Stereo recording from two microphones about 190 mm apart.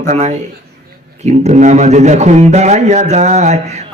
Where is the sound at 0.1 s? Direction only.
35° right (ahead or behind).